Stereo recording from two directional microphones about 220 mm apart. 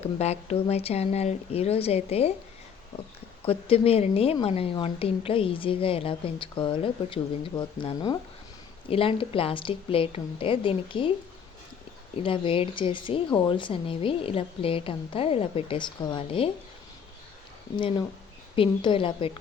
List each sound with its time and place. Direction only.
0.0 s a woman's voice: 30° left (ahead or behind)
3.4 s a woman's voice: 25° left (ahead or behind)
12.1 s a woman's voice: 25° left (ahead or behind)
17.7 s a woman's voice: 20° left (ahead or behind)